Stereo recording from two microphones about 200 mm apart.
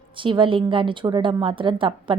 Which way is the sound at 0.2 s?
25° right (ahead or behind).